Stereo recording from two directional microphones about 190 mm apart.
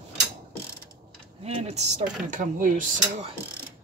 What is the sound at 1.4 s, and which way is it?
Speech, 35° right (ahead or behind).